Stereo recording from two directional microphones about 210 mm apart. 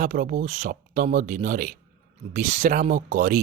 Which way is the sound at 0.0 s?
40° right (ahead or behind).